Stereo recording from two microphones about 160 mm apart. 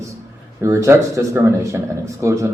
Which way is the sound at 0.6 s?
15° right (ahead or behind).